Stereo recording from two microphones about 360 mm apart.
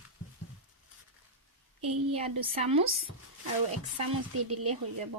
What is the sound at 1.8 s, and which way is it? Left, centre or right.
Speech, centre.